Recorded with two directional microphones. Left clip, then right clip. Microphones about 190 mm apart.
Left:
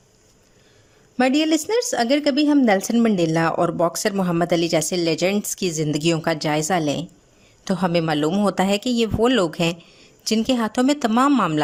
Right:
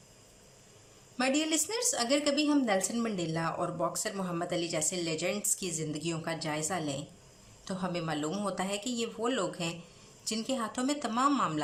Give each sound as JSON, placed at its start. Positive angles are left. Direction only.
{"t": 1.1, "sound": "a woman's voice", "side_deg": 50}